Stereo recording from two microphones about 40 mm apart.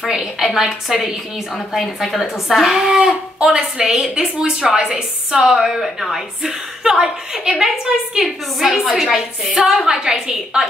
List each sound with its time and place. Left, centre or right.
0.0 s a woman's voice: centre